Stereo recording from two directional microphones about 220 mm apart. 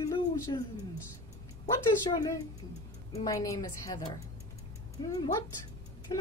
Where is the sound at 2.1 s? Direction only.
15° left (ahead or behind).